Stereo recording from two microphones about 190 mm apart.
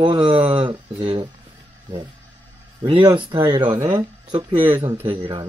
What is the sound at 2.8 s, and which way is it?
Speech, 20° right (ahead or behind).